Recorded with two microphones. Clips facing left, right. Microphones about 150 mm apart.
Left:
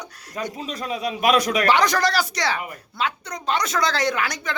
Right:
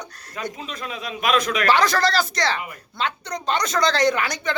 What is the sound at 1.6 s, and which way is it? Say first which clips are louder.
A woman's voice: even; 15° left (ahead or behind).